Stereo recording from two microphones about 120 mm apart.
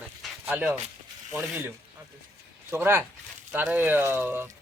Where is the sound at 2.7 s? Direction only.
20° right (ahead or behind).